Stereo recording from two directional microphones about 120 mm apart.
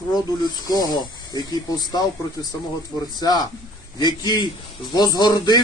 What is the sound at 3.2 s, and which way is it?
Speech, 35° left (ahead or behind).